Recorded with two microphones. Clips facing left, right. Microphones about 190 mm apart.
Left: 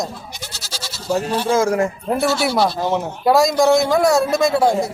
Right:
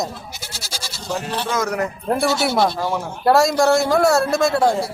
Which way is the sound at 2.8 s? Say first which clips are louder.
Left 3 dB; 20° left (ahead or behind).